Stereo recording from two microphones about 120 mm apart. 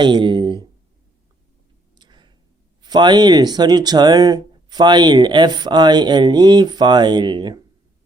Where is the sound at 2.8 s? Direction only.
35° right (ahead or behind).